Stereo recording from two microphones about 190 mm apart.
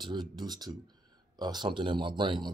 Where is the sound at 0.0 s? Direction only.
25° right (ahead or behind).